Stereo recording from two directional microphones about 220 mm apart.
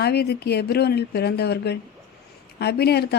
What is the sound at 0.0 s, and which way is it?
A woman's voice, 45° left (ahead or behind).